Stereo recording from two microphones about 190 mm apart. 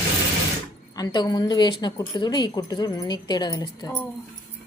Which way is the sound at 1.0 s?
20° left (ahead or behind).